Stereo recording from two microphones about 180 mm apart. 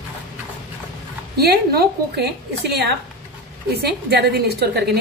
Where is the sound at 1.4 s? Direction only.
60° right (ahead or behind).